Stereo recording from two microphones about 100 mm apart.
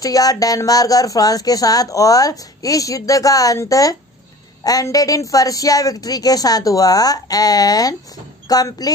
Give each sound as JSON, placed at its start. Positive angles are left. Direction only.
{"t": 0.0, "sound": "speech", "side_deg": 35}